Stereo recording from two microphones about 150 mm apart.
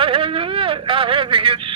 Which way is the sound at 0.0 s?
35° right (ahead or behind).